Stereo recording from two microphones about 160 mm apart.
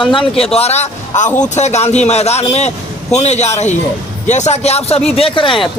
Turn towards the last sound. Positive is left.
turn(degrees=35)  # may be behind; listen again after turning